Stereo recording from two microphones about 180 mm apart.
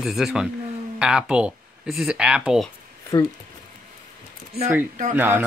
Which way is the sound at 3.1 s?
20° left (ahead or behind).